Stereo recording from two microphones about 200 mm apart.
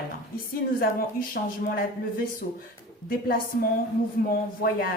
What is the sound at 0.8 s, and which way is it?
A woman's voice, 45° left (ahead or behind).